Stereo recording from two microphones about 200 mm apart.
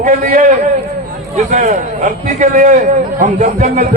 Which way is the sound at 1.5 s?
40° right (ahead or behind).